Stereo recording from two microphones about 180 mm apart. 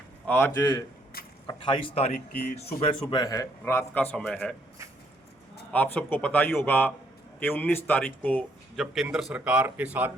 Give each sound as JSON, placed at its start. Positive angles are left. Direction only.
{"t": 0.3, "sound": "speech", "side_deg": 15}
{"t": 1.5, "sound": "speech", "side_deg": 25}
{"t": 2.1, "sound": "speech", "side_deg": 60}
{"t": 2.6, "sound": "speech", "side_deg": 35}
{"t": 3.1, "sound": "speech", "side_deg": 20}
{"t": 5.7, "sound": "speech", "side_deg": 10}